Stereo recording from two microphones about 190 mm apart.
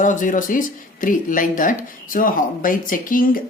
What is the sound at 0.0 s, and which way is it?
Speech, 40° left (ahead or behind).